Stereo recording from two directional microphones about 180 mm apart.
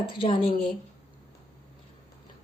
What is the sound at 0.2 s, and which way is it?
Speech, 30° left (ahead or behind).